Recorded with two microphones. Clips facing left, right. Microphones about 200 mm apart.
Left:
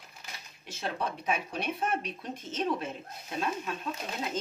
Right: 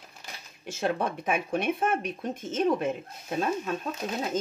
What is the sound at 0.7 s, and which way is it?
Speech, 50° right (ahead or behind).